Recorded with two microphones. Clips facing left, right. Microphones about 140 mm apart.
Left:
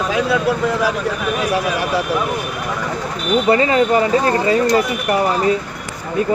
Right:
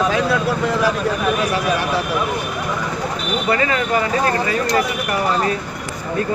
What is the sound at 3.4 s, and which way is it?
Speech, 30° left (ahead or behind).